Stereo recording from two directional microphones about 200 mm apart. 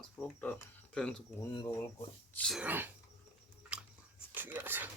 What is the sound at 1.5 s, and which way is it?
Speech, 20° left (ahead or behind).